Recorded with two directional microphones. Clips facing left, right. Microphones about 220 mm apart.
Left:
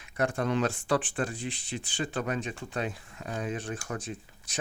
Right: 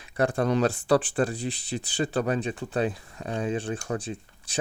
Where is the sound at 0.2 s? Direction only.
35° right (ahead or behind).